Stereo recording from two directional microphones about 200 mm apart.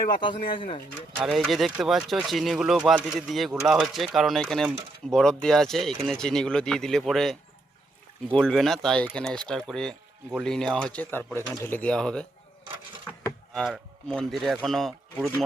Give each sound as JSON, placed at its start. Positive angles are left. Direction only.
{"t": 0.5, "sound": "speech", "side_deg": 25}
{"t": 1.1, "sound": "speech", "side_deg": 0}
{"t": 13.2, "sound": "speech", "side_deg": 0}